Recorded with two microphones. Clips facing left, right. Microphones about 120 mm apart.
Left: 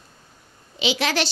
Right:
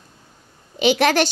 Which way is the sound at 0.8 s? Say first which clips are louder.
Right 7 dB; 50° right (ahead or behind).